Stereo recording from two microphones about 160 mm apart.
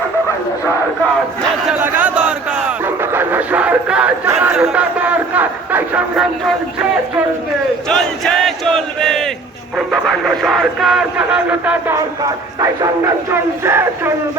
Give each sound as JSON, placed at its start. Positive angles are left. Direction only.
{"t": 1.7, "sound": "a sound", "side_deg": -10}
{"t": 4.4, "sound": "crowd", "side_deg": -5}
{"t": 7.9, "sound": "battle cry", "side_deg": 5}
{"t": 9.7, "sound": "speech", "side_deg": 0}
{"t": 11.9, "sound": "speech", "side_deg": -20}